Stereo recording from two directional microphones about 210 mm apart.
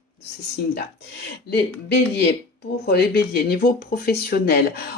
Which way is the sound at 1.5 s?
50° left (ahead or behind).